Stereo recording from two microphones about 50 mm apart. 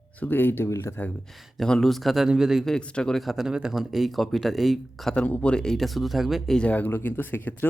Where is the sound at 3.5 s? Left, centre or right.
Centre.